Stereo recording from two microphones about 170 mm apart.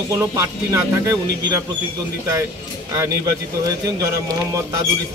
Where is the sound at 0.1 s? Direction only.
20° right (ahead or behind).